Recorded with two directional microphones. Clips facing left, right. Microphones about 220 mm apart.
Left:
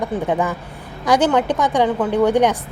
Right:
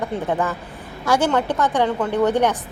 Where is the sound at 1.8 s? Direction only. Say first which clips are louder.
Left 3 dB; centre (ahead or behind).